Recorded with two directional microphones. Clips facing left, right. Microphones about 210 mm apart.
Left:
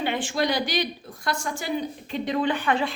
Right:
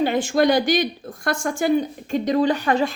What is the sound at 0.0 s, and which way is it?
A woman's voice, 40° right (ahead or behind).